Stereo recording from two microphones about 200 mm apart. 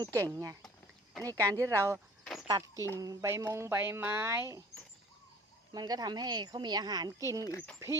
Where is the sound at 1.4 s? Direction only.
15° right (ahead or behind).